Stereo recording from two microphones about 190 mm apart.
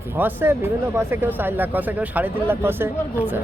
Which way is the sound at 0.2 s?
10° right (ahead or behind).